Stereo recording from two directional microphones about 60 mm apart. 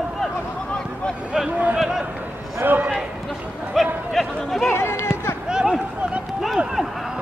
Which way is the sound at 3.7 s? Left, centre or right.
Centre.